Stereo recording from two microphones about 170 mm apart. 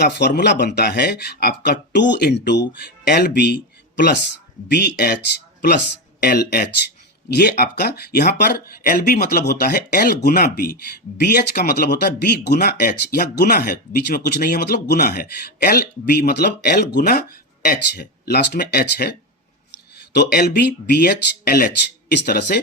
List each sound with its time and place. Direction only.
0.0 s speech: 75° left (ahead or behind)
1.9 s speech: 90° left
3.1 s speech: 70° left (ahead or behind); by 4.2 s 90° left
4.7 s speech: 70° left (ahead or behind)
6.2 s speech: 70° left (ahead or behind)
20.1 s speech: 70° left (ahead or behind)
22.1 s speech: 75° left (ahead or behind)